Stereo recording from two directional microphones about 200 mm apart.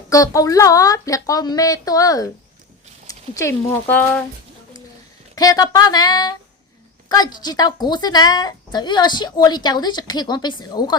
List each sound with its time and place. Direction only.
0.1 s a woman's voice: 15° left (ahead or behind)
5.3 s a woman's voice: 15° left (ahead or behind)